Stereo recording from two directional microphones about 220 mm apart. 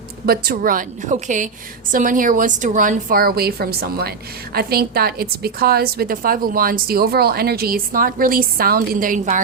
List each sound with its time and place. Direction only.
0.3 s a woman's voice: 40° right (ahead or behind)